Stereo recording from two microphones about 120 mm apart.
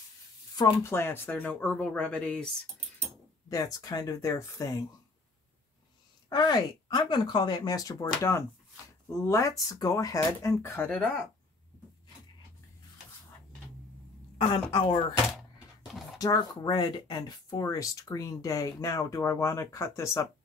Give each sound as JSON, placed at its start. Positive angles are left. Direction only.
{"t": 0.8, "sound": "speech", "side_deg": 20}
{"t": 3.4, "sound": "speech", "side_deg": 30}
{"t": 6.2, "sound": "speech", "side_deg": 35}
{"t": 14.4, "sound": "speech", "side_deg": 40}
{"t": 16.2, "sound": "speech", "side_deg": 30}